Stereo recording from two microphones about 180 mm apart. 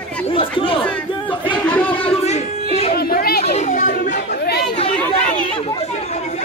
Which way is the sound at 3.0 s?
55° left (ahead or behind).